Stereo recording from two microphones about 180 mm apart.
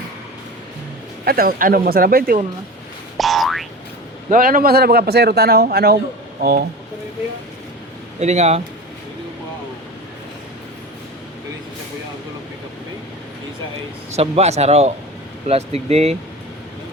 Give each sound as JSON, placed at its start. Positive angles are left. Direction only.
{"t": 1.2, "sound": "a man's voice", "side_deg": -55}
{"t": 3.2, "sound": "boing", "side_deg": 0}
{"t": 4.3, "sound": "a man's voice", "side_deg": -50}
{"t": 8.2, "sound": "speech", "side_deg": -40}
{"t": 14.2, "sound": "speech", "side_deg": -35}